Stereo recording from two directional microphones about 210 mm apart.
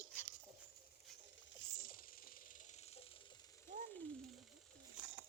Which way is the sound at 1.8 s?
45° left (ahead or behind).